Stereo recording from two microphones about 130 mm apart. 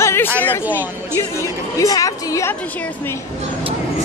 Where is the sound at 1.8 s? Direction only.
25° left (ahead or behind).